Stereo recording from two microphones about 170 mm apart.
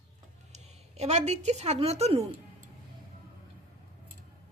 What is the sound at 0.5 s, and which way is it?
A woman's voice, 40° right (ahead or behind).